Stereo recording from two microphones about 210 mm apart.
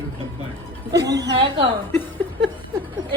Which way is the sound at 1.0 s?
15° right (ahead or behind).